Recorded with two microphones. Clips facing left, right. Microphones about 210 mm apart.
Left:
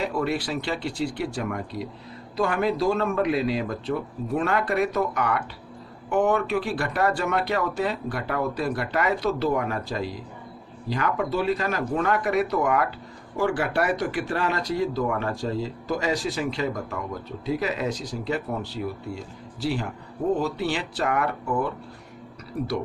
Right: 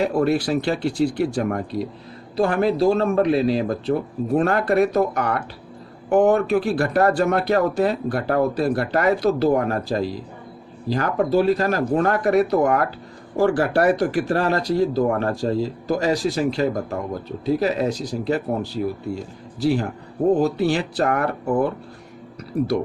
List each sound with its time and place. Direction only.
0.0 s speech: 40° right (ahead or behind)
2.3 s speech: 35° right (ahead or behind)
19.6 s speech: 45° right (ahead or behind)